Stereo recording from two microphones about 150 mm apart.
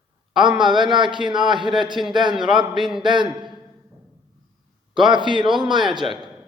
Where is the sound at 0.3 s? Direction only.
30° right (ahead or behind).